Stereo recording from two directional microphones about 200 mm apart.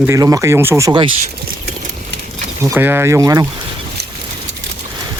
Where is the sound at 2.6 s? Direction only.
10° right (ahead or behind).